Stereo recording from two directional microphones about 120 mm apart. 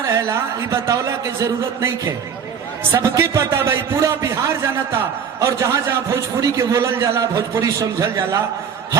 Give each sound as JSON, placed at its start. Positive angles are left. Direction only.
{"t": 0.2, "sound": "a man's voice", "side_deg": -25}